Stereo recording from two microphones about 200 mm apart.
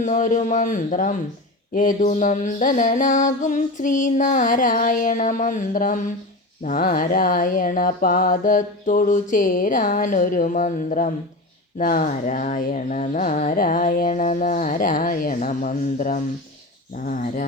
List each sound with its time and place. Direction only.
0.0 s speech: 40° left (ahead or behind)
6.6 s a sound: 40° left (ahead or behind)
11.8 s speech: 40° left (ahead or behind)